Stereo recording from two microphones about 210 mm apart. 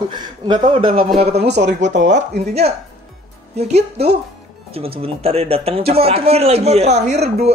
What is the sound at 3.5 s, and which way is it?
Speech, 30° right (ahead or behind).